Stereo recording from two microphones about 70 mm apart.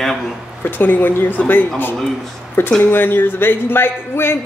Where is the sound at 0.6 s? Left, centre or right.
Left.